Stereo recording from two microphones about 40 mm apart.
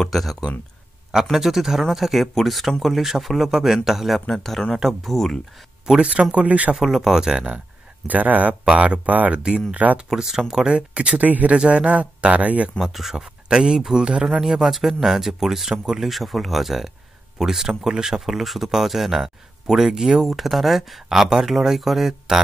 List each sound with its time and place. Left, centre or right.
0.0 s speech: centre
4.3 s speech: centre
4.7 s speech: centre
5.1 s speech: centre
6.3 s speech: right
6.8 s speech: centre
8.1 s speech: right
8.7 s speech: right
9.3 s speech: right
11.2 s speech: right
11.5 s speech: right
12.8 s speech: centre
13.5 s speech: centre
16.0 s speech: centre